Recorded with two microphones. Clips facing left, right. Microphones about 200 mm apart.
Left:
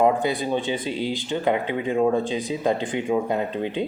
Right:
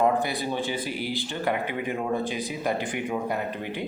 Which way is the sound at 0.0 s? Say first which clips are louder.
Left 4 dB; 15° left (ahead or behind).